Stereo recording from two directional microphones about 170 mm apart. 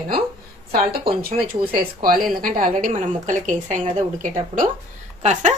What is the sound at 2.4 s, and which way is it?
A woman's voice, 55° right (ahead or behind).